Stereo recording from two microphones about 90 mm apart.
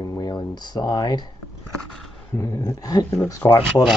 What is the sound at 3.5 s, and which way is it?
Speech, 60° left (ahead or behind).